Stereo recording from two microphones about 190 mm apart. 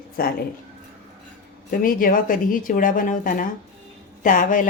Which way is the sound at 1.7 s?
45° left (ahead or behind).